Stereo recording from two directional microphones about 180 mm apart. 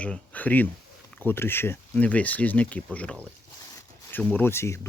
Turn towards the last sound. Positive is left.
turn(degrees=15)  # may be behind; listen again after turning